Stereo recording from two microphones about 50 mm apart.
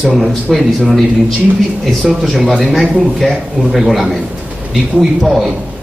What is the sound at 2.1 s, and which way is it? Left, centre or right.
A man's voice, centre.